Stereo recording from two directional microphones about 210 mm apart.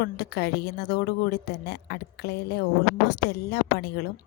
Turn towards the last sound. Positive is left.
turn(degrees=50)  # may be behind; listen again after turning